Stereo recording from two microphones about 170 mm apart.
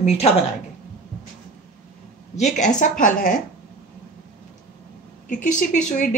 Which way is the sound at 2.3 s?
45° left (ahead or behind).